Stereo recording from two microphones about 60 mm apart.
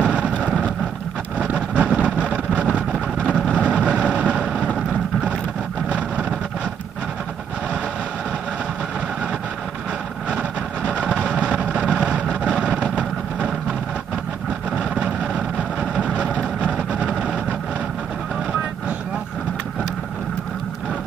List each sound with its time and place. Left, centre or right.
0.0 s vehicle: centre
5.9 s vehicle: right
10.9 s vehicle: centre
14.8 s vehicle: centre